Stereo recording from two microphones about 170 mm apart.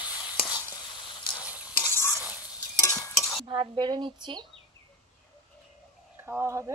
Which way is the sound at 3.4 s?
25° right (ahead or behind).